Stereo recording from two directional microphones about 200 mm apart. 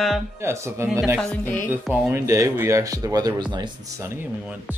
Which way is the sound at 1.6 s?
10° right (ahead or behind).